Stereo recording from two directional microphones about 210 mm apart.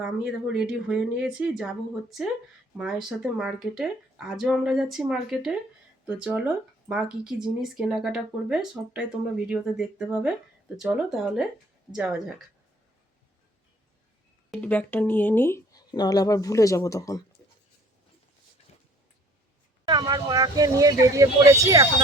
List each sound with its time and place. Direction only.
0.0 s speech: 5° right (ahead or behind)
14.5 s speech: 5° left (ahead or behind)
19.9 s speech: 20° right (ahead or behind)